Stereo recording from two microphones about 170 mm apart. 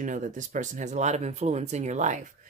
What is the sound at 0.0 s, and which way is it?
Speech, 50° right (ahead or behind).